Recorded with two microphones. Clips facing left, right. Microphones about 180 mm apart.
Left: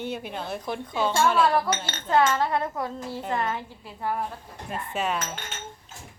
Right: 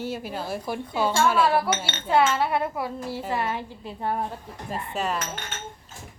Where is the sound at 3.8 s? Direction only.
25° right (ahead or behind).